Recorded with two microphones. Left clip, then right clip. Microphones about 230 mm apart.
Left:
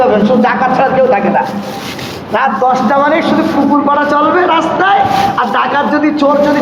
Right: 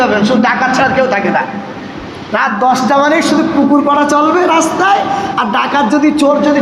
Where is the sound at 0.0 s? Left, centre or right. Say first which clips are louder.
Left 2 dB; right.